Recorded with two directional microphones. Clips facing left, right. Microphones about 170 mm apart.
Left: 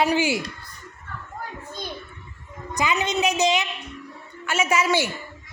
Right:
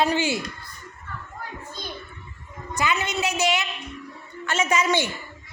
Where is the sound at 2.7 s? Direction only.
15° left (ahead or behind).